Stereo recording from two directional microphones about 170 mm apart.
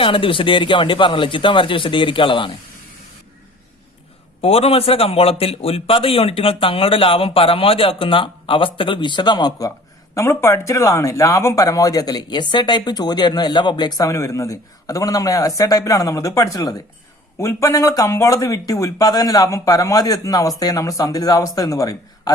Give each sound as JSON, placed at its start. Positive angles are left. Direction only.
{"t": 0.0, "sound": "a man's voice", "side_deg": 30}
{"t": 4.4, "sound": "a man's voice", "side_deg": 35}